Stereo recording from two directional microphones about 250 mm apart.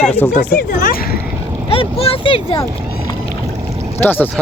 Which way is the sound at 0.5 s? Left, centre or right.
Left.